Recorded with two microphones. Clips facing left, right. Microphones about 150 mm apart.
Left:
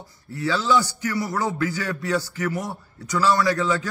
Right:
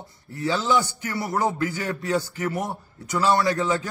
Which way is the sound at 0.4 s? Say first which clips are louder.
Left 1 dB; 20° right (ahead or behind).